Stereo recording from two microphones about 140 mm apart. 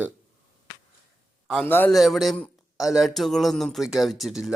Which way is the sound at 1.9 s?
Centre (ahead or behind).